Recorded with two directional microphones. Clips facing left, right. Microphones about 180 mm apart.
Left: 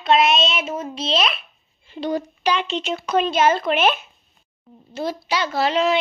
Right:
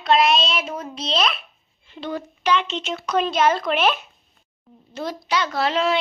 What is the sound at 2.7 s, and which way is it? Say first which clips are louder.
A child's voice: left 2 dB; 10° left (ahead or behind).